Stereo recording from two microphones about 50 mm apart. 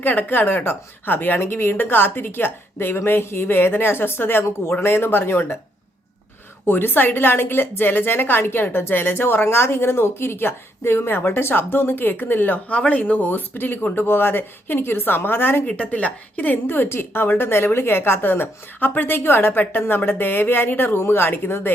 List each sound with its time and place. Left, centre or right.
0.0 s a woman's voice: left
6.7 s a woman's voice: left
15.7 s a woman's voice: left